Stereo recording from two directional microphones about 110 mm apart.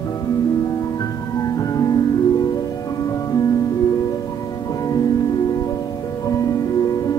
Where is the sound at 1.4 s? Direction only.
35° left (ahead or behind).